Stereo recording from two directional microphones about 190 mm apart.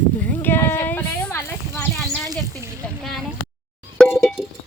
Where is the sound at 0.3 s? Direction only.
10° left (ahead or behind).